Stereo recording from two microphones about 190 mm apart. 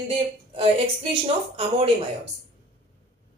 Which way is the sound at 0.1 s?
30° right (ahead or behind).